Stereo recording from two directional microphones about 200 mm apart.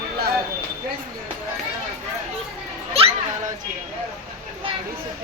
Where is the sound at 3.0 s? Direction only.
30° right (ahead or behind).